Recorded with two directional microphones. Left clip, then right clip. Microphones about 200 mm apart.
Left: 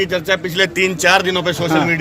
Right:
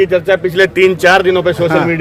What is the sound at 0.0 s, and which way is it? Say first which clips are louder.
A man's voice: right 6 dB; 35° right (ahead or behind).